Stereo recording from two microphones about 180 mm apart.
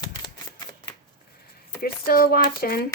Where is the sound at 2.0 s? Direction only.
55° left (ahead or behind).